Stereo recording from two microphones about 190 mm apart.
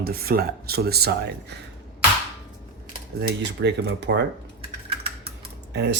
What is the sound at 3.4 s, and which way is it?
Speech, 65° right (ahead or behind).